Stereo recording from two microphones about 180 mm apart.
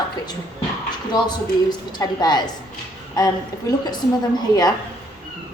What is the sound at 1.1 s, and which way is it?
A woman's voice, 25° left (ahead or behind).